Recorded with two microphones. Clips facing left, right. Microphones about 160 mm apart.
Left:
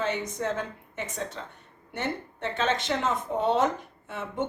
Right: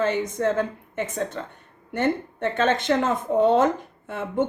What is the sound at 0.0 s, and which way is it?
A woman's voice, 50° right (ahead or behind).